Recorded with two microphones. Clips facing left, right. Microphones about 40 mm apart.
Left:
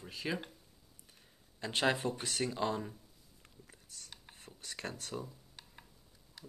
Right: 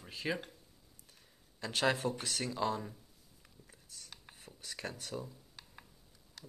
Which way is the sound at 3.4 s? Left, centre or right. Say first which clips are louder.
Left 2 dB; centre.